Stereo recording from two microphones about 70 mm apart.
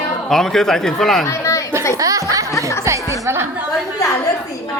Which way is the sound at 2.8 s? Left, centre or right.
Right.